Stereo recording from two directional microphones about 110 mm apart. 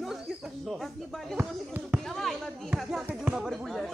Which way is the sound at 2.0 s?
Centre (ahead or behind).